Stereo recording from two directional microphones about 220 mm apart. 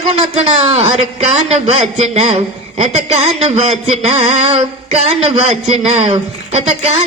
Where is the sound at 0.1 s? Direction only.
30° right (ahead or behind).